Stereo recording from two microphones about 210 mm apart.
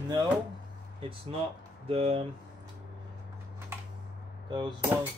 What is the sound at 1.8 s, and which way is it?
Speech, 30° right (ahead or behind).